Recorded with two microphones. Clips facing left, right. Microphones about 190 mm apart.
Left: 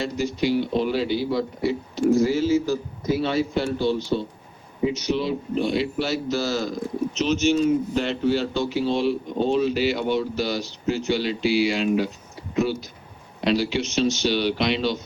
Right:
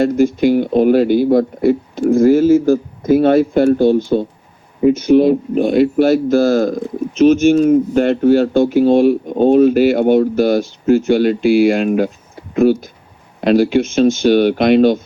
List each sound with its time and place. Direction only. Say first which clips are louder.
0.0 s speech: right 12 dB; 50° right (ahead or behind)